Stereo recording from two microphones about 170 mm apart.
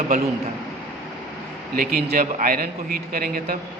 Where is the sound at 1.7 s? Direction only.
60° right (ahead or behind).